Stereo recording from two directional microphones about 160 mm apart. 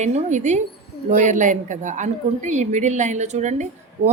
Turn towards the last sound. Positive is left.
turn(degrees=-45)  # may be behind; listen again after turning